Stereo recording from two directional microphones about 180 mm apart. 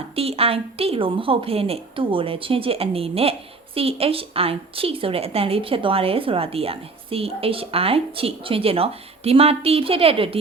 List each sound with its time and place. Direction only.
0.2 s a woman's voice: 35° right (ahead or behind)